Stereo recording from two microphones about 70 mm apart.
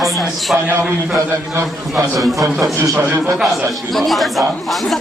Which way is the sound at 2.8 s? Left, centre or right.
Right.